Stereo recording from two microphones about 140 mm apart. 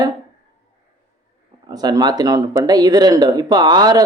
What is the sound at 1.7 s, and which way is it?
A man's voice, 25° right (ahead or behind).